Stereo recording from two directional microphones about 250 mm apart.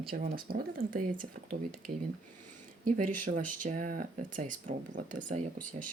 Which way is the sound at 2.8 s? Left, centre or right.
Right.